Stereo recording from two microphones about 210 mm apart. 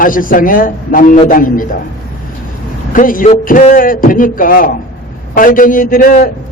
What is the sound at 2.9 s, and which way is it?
A man's voice, 40° left (ahead or behind).